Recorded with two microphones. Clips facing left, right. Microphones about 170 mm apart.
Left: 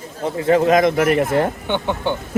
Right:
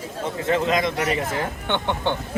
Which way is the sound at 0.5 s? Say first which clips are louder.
Left 8 dB; 45° left (ahead or behind).